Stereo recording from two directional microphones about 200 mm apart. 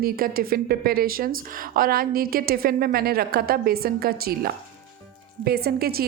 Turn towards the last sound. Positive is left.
turn(degrees=-50)  # may be behind; listen again after turning